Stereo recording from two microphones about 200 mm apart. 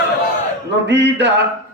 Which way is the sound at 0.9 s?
60° right (ahead or behind).